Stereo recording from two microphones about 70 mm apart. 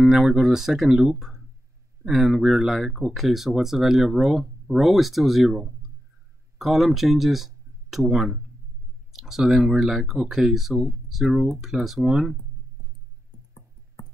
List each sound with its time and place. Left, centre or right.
0.0 s speech: centre